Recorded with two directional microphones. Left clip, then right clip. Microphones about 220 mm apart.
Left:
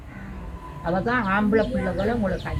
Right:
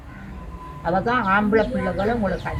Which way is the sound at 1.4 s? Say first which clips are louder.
Right 2 dB; 15° right (ahead or behind).